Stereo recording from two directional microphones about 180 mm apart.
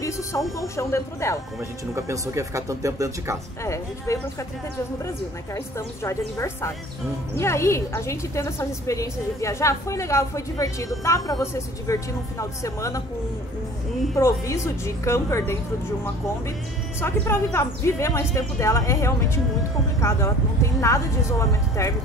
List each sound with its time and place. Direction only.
0.0 s speech: 15° left (ahead or behind)
2.0 s speech: 15° right (ahead or behind)
3.6 s a woman's voice: 15° left (ahead or behind)
14.1 s a woman's voice: 15° left (ahead or behind)
17.0 s a woman's voice: 10° left (ahead or behind)